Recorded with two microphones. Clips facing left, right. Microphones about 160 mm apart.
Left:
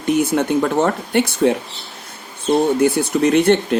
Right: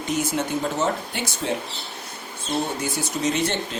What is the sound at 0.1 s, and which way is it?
Speech, 55° left (ahead or behind).